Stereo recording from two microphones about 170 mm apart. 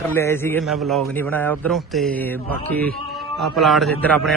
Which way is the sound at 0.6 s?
Centre (ahead or behind).